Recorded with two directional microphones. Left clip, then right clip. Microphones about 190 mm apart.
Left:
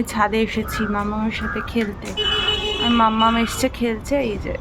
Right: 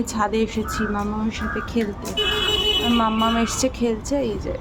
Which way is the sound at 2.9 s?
20° left (ahead or behind).